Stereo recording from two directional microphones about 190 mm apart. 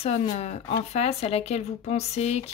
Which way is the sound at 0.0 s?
35° left (ahead or behind).